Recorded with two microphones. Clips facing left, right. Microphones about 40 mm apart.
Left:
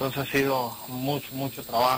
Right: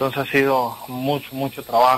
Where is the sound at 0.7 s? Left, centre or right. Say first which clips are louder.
Right 7 dB; right.